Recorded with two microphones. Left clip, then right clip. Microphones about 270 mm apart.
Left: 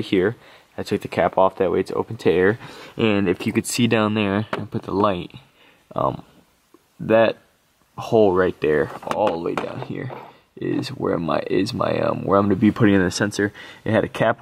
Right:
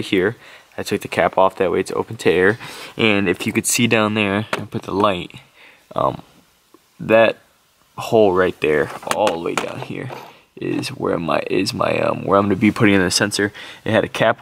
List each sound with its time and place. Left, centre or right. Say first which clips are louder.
0.0 s speech: right 2 dB; centre
7.0 s speech: right 3 dB; centre
7.9 s speech: right 2 dB; centre